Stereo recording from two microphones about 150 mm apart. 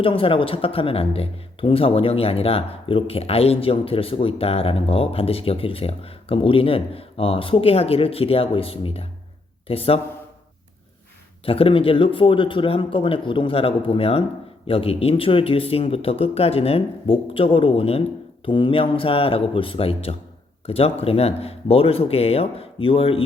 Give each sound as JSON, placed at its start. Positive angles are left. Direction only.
{"t": 0.0, "sound": "speech", "side_deg": 35}
{"t": 11.4, "sound": "speech", "side_deg": 35}